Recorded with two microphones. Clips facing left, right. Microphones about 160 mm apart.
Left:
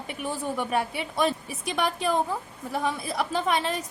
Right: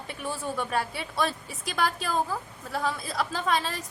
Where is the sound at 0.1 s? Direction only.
20° left (ahead or behind).